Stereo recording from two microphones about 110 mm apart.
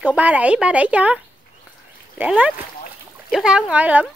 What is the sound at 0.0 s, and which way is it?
A woman's voice, 15° right (ahead or behind).